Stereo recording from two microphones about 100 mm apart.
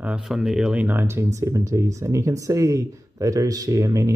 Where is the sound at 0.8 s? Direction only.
25° right (ahead or behind).